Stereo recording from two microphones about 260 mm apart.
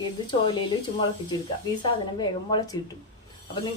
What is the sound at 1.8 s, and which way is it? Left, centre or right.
Speech, centre.